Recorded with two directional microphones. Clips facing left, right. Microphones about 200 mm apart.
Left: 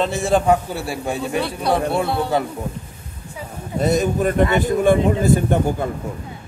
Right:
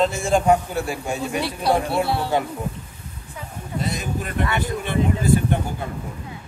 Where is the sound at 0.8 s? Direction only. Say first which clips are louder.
Left 2 dB; 35° left (ahead or behind).